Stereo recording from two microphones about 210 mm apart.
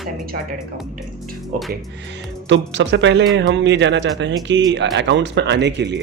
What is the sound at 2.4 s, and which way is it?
A woman's voice, 60° right (ahead or behind).